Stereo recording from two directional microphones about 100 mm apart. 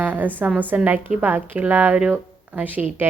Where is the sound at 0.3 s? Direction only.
15° right (ahead or behind).